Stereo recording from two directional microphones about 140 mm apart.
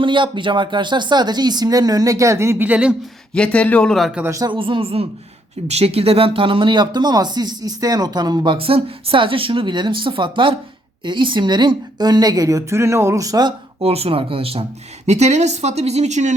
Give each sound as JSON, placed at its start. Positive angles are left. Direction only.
{"t": 0.0, "sound": "speech", "side_deg": -35}
{"t": 3.3, "sound": "speech", "side_deg": 10}
{"t": 4.2, "sound": "speech", "side_deg": -25}
{"t": 4.5, "sound": "speech", "side_deg": -40}
{"t": 13.8, "sound": "speech", "side_deg": -45}
{"t": 15.0, "sound": "speech", "side_deg": -55}